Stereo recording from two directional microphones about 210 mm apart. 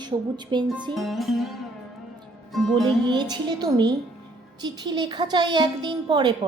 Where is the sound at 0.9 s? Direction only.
Centre (ahead or behind).